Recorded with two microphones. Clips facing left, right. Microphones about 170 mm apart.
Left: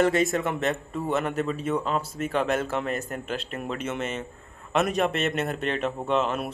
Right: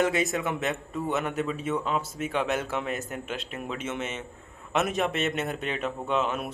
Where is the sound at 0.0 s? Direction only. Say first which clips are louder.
Left 3 dB; centre (ahead or behind).